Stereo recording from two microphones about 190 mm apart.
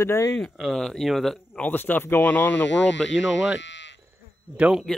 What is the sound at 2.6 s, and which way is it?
Speech, 75° left (ahead or behind).